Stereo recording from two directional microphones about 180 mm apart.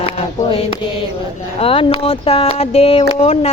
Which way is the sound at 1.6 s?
30° left (ahead or behind).